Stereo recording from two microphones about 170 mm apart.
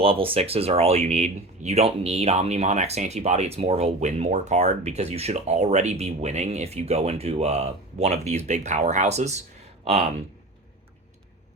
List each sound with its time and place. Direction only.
0.0 s speech: 35° right (ahead or behind)